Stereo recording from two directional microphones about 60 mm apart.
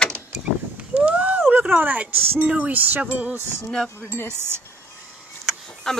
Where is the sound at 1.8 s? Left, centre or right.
Right.